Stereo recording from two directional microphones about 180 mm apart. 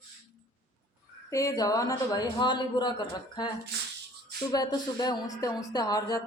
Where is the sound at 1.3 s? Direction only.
20° left (ahead or behind).